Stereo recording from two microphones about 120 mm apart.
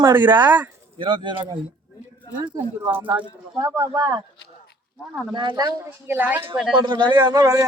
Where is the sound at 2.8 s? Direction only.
20° right (ahead or behind).